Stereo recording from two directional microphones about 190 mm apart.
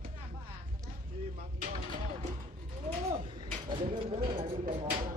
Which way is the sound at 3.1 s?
25° right (ahead or behind).